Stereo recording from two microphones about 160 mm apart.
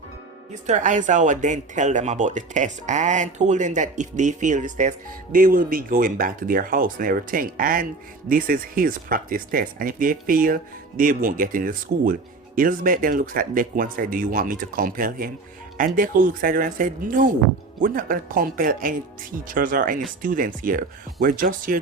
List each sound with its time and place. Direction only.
0.5 s speech: 50° right (ahead or behind)